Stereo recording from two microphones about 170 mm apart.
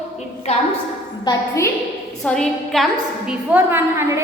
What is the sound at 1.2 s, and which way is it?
Speech, 20° left (ahead or behind).